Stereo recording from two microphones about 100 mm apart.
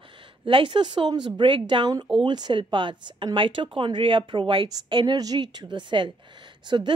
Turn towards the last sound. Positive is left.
turn(degrees=-50)  # may be behind; listen again after turning